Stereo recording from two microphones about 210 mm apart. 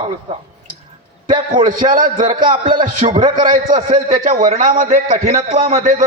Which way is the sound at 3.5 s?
40° right (ahead or behind).